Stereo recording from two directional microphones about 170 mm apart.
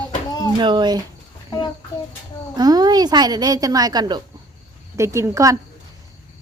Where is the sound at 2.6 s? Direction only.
25° right (ahead or behind).